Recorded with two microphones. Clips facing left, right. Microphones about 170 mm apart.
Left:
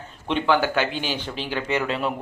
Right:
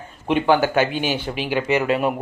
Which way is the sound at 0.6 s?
45° right (ahead or behind).